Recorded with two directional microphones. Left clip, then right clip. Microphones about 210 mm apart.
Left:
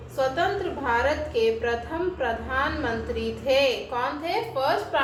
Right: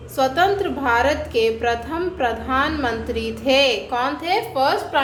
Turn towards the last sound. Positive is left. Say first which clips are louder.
# right 5 dB
turn(degrees=-50)  # may be behind; listen again after turning